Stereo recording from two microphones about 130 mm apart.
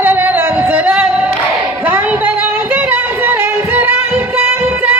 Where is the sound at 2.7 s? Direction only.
15° right (ahead or behind).